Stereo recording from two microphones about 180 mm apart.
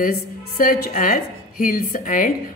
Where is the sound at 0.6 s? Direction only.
50° left (ahead or behind).